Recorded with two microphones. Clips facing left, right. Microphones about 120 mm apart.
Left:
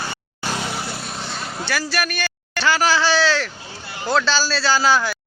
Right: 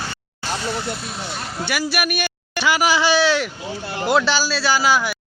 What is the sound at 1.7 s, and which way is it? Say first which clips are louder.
A man's voice: right 1 dB; 15° right (ahead or behind).